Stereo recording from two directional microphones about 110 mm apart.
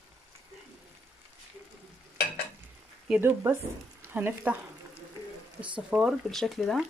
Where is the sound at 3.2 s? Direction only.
20° right (ahead or behind).